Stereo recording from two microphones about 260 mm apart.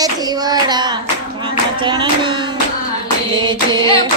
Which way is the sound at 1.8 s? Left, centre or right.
Centre.